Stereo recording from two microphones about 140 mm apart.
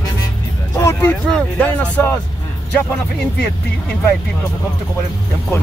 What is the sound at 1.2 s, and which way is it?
Speech, 5° left (ahead or behind).